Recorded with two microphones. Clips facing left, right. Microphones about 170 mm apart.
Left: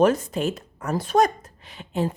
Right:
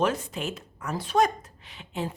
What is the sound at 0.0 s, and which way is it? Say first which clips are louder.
A woman's voice: left 7 dB; 40° left (ahead or behind).